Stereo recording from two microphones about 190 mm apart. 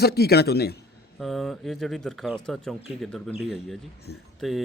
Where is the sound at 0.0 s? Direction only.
55° left (ahead or behind).